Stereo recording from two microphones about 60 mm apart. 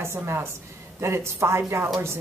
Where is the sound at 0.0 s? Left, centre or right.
Right.